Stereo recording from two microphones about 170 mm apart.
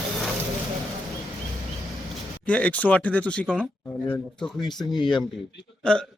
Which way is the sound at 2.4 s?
10° left (ahead or behind).